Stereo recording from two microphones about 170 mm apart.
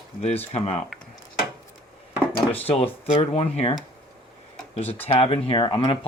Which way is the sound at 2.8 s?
35° left (ahead or behind).